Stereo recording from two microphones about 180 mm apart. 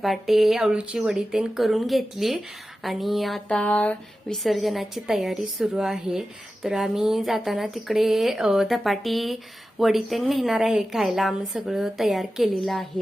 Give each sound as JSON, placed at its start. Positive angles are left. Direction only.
{"t": 0.0, "sound": "speech", "side_deg": 0}